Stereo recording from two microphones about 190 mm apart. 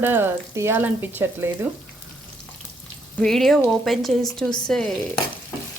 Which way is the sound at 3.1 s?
Centre (ahead or behind).